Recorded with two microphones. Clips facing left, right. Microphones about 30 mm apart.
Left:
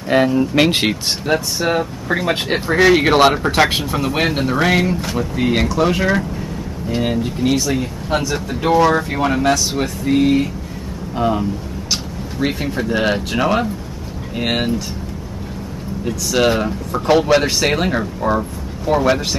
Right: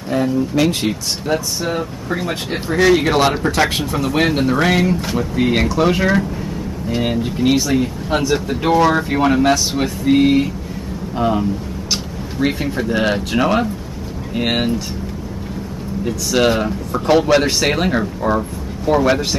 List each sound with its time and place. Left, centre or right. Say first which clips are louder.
0.3 s speech: left 2 dB; left
1.8 s speech: left 3 dB; centre
2.2 s speech: left 4 dB; left
2.8 s speech: left 2 dB; centre
16.1 s speech: even; centre